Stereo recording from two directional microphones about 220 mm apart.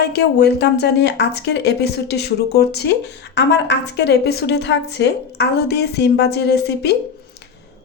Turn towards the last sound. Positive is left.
turn(degrees=50)  # may be behind; listen again after turning